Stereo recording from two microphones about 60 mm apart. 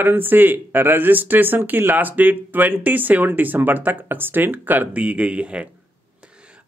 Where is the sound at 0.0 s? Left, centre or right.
Right.